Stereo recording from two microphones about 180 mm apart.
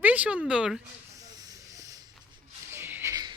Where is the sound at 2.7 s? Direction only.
10° right (ahead or behind).